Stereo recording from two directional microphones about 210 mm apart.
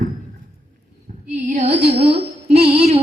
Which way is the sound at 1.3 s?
35° right (ahead or behind).